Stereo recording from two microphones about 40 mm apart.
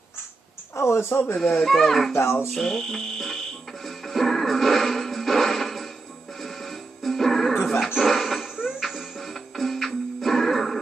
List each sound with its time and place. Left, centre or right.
0.8 s speech: left
1.4 s speech: centre
2.5 s music: centre
8.0 s a sound: centre
8.5 s music: centre
8.8 s music: centre